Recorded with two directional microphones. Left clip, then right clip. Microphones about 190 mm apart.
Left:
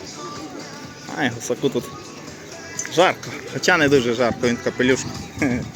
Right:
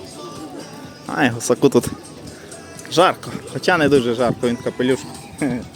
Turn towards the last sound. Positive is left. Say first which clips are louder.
# left 1 dB
turn(degrees=-5)  # may be behind; listen again after turning